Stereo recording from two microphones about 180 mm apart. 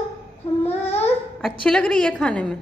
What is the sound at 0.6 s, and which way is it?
Babbling, 35° left (ahead or behind).